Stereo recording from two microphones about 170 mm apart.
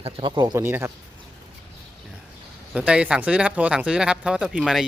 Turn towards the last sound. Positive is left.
turn(degrees=-5)  # may be behind; listen again after turning